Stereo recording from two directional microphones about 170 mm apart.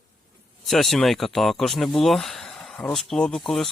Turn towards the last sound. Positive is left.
turn(degrees=0)  # may be behind; listen again after turning